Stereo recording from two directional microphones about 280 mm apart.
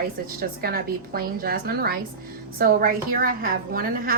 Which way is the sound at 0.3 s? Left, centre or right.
Right.